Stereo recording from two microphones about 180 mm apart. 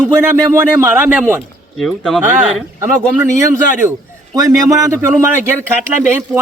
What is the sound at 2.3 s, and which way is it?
Speech, 10° right (ahead or behind).